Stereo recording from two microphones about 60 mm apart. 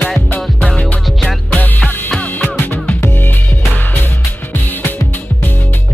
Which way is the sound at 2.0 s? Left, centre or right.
Left.